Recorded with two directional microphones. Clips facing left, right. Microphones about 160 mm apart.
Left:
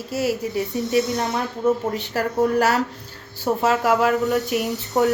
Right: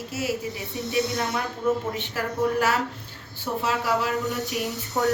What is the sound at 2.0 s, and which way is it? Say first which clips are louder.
Speech: left 5 dB; 40° left (ahead or behind).